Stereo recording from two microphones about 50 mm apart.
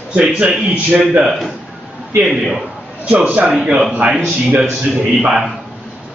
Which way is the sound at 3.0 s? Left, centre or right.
Right.